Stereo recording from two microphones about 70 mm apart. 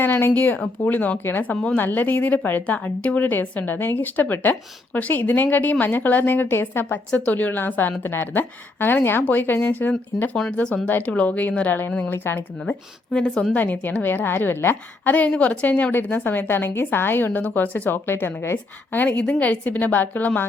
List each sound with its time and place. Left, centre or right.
0.0 s a woman's voice: left; by 10.8 s centre
10.8 s a woman's voice: left
12.1 s a woman's voice: left
13.1 s speech: centre
13.5 s a woman's voice: left
15.3 s a woman's voice: centre
18.9 s a woman's voice: left